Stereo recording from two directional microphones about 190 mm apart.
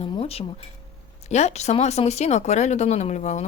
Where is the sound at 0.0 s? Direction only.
30° left (ahead or behind).